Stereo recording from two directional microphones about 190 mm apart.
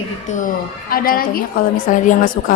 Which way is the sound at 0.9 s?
50° left (ahead or behind).